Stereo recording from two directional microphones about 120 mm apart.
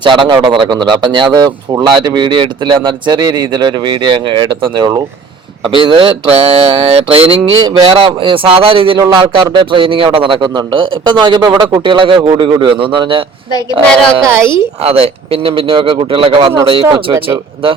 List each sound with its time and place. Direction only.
0.0 s a man's voice: 40° right (ahead or behind)
14.8 s a man's voice: 55° right (ahead or behind)